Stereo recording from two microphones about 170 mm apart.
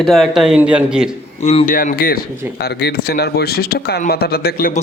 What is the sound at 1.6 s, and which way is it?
A man's voice, 55° left (ahead or behind).